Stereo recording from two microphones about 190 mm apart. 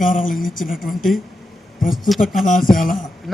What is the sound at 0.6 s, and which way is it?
Speech, centre (ahead or behind).